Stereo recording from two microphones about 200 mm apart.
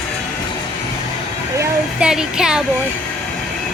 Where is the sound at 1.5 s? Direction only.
5° right (ahead or behind).